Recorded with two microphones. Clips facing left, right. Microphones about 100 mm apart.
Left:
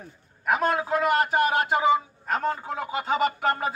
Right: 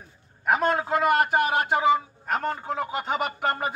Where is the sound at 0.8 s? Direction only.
5° right (ahead or behind).